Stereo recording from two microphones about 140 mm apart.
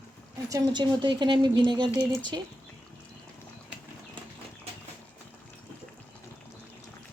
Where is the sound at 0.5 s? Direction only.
30° right (ahead or behind).